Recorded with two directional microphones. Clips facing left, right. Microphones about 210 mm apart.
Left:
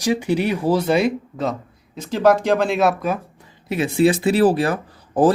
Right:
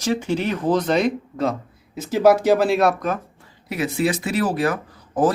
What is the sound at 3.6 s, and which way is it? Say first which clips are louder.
Speech: left 5 dB; 25° left (ahead or behind).